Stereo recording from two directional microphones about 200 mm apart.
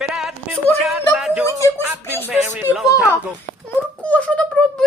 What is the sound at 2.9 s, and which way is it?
Speech, 15° left (ahead or behind).